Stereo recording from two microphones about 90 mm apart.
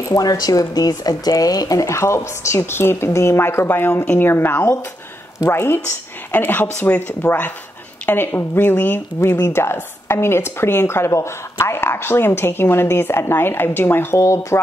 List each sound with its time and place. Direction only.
0.1 s speech: 45° left (ahead or behind)